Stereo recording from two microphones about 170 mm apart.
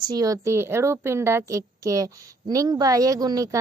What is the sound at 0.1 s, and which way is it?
A woman's voice, 20° right (ahead or behind).